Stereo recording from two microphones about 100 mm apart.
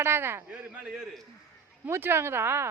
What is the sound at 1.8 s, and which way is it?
Speech, 25° right (ahead or behind).